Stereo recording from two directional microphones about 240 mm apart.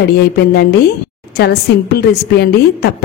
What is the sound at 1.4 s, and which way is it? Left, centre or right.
A woman's voice, left.